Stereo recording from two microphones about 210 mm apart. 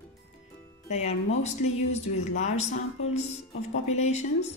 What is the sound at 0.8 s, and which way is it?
Speech, 30° left (ahead or behind).